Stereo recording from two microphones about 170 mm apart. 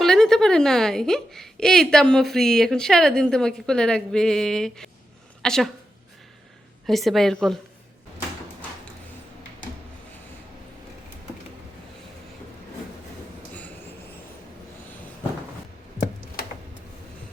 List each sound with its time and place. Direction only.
0.0 s a woman's voice: 5° left (ahead or behind)
6.8 s a woman's voice: centre (ahead or behind)
16.0 s a sound: 60° left (ahead or behind)